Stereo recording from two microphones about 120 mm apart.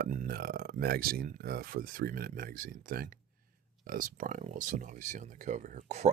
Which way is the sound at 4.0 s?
90° right.